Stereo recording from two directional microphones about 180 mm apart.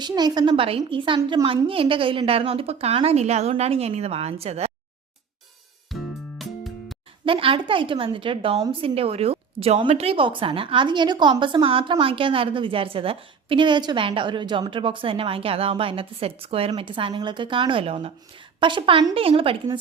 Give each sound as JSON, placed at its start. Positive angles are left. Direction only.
{"t": 0.0, "sound": "a woman's voice", "side_deg": -20}
{"t": 5.9, "sound": "music", "side_deg": 0}
{"t": 7.3, "sound": "a woman's voice", "side_deg": -30}